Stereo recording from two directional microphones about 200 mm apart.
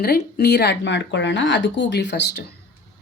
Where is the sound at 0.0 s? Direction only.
55° left (ahead or behind).